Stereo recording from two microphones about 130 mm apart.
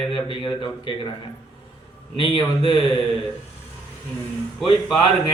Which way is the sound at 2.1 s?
40° left (ahead or behind).